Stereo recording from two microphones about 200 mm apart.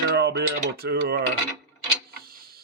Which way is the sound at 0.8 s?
50° right (ahead or behind).